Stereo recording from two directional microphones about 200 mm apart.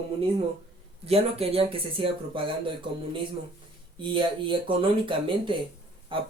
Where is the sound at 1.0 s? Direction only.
30° right (ahead or behind).